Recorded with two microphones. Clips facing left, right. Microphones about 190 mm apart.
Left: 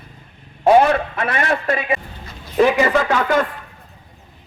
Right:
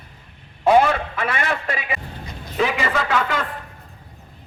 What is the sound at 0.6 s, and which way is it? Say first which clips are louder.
A man's voice: left 3 dB; 45° left (ahead or behind).